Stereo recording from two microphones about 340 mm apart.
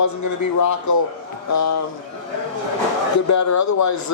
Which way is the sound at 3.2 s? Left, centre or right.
Left.